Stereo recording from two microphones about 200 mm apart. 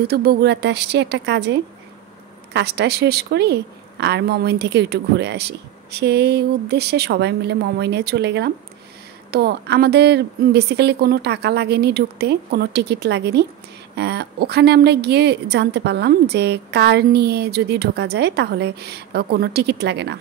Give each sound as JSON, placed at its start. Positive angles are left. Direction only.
{"t": 0.1, "sound": "a woman's voice", "side_deg": -50}